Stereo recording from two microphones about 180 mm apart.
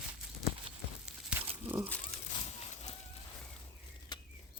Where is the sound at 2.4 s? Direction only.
40° left (ahead or behind).